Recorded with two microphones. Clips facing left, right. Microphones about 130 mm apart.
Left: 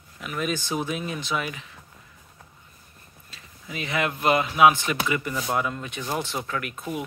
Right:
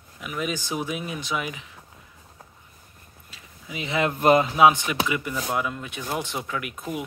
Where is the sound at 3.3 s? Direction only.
15° right (ahead or behind).